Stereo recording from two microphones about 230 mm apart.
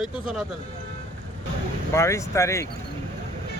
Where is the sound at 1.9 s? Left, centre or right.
Centre.